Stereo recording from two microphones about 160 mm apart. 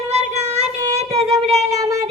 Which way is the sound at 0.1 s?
40° right (ahead or behind).